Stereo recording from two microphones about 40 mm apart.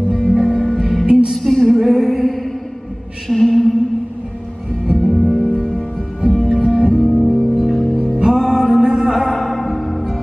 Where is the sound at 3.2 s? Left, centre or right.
Centre.